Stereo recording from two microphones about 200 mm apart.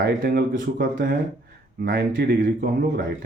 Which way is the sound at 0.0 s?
50° right (ahead or behind).